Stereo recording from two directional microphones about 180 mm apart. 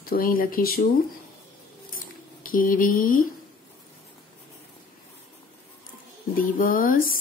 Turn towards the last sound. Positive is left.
turn(degrees=50)  # may be behind; listen again after turning